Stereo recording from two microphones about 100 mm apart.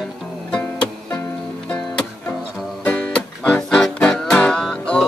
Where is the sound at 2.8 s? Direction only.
10° left (ahead or behind).